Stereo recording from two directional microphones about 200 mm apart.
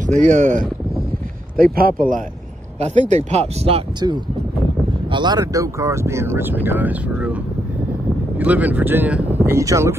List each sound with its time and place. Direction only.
0.0 s speech: 40° right (ahead or behind); by 7.3 s 5° right (ahead or behind)
8.4 s speech: 10° right (ahead or behind)